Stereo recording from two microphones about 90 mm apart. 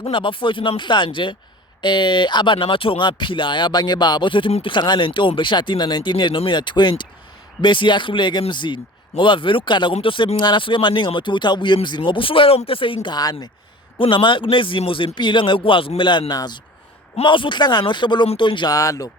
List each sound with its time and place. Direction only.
0.0 s a man's voice: 70° left (ahead or behind)
13.0 s speech: 50° left (ahead or behind)
14.0 s a man's voice: 65° left (ahead or behind)
17.2 s speech: 65° left (ahead or behind)
18.7 s speech: 40° left (ahead or behind)